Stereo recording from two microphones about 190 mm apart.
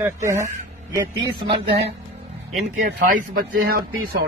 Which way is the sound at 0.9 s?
20° right (ahead or behind).